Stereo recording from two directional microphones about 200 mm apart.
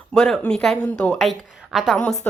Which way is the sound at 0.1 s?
5° left (ahead or behind).